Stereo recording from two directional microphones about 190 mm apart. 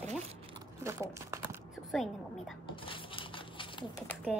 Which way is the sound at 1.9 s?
Centre (ahead or behind).